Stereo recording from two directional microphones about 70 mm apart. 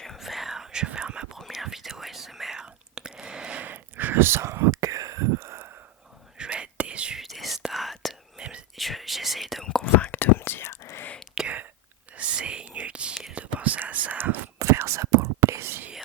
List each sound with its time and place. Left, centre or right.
0.0 s whispering: centre
1.4 s whispering: centre
3.6 s whispering: right
6.3 s whispering: centre
7.2 s whispering: centre
8.4 s whispering: centre
8.7 s whispering: centre
9.6 s whispering: centre; by 11.0 s left
11.3 s whispering: centre
14.8 s whispering: right